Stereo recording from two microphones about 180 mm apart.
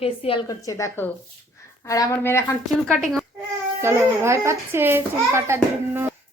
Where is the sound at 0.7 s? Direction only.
15° left (ahead or behind).